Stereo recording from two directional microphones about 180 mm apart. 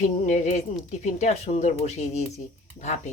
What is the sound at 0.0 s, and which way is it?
Speech, 45° left (ahead or behind).